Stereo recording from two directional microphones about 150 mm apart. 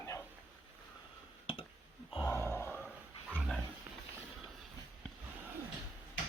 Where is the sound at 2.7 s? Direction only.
5° right (ahead or behind).